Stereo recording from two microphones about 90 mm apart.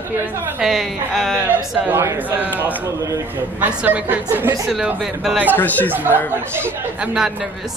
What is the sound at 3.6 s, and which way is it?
Speech, 15° right (ahead or behind).